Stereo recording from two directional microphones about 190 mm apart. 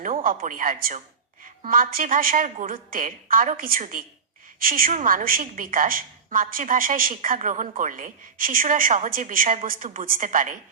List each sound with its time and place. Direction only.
0.0 s a woman's voice: 45° right (ahead or behind)